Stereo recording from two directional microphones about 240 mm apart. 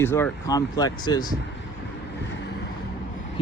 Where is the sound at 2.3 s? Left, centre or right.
Left.